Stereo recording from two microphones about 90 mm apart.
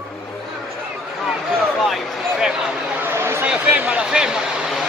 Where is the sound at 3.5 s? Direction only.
15° right (ahead or behind).